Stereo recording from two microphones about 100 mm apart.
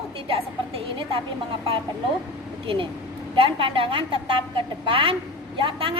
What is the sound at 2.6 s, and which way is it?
A woman's voice, 60° right (ahead or behind).